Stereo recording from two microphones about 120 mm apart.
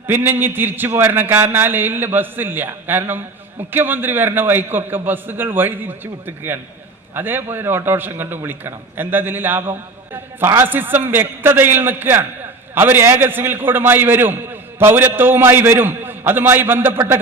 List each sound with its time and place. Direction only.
0.1 s a man's voice: 20° right (ahead or behind)